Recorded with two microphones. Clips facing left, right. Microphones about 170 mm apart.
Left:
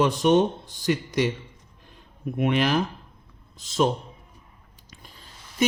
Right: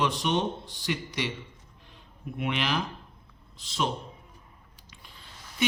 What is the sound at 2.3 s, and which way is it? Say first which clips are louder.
Speech: left 7 dB; 45° left (ahead or behind).